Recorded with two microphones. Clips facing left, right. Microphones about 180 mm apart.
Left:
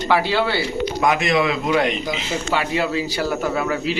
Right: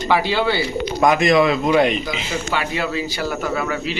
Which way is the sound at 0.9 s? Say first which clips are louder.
Right 5 dB; 40° right (ahead or behind).